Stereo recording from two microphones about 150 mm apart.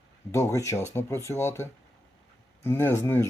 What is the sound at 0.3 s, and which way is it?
Speech, 20° left (ahead or behind).